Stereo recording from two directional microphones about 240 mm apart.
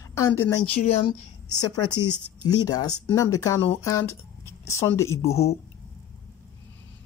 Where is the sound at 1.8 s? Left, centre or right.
Left.